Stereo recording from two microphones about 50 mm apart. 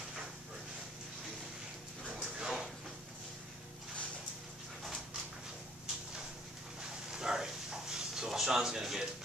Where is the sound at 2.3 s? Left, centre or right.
Centre.